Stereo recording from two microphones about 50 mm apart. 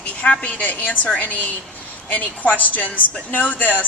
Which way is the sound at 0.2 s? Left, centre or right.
Left.